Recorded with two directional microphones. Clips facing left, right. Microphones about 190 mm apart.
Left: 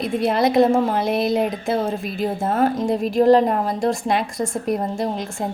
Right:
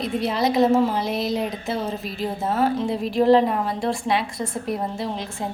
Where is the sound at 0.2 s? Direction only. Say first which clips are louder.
Left 3 dB; 55° left (ahead or behind).